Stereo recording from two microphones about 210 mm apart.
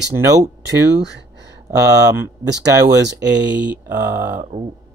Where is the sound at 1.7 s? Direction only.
15° right (ahead or behind).